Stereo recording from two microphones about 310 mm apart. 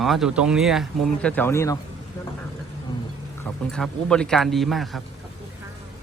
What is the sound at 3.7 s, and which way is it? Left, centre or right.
Speech, centre.